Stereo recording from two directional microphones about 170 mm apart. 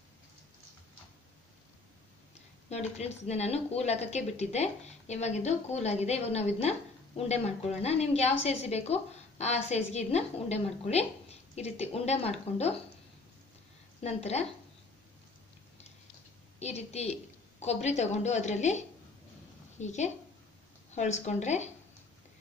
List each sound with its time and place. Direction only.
2.7 s a woman's voice: 40° left (ahead or behind)
14.0 s a woman's voice: 40° left (ahead or behind)
16.5 s a woman's voice: 40° left (ahead or behind)